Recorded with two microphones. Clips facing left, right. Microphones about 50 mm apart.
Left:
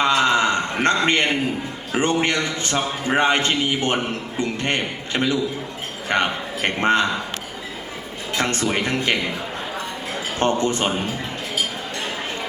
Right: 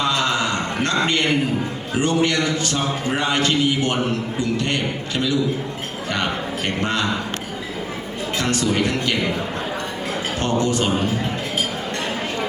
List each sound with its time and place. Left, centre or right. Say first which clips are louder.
0.0 s a sound: left 3 dB; left
1.9 s a man's voice: even; left
8.4 s a man's voice: right 1 dB; left
10.6 s a man's voice: right 2 dB; left